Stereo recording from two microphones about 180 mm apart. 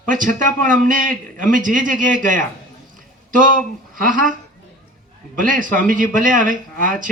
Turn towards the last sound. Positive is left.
turn(degrees=-45)  # may be behind; listen again after turning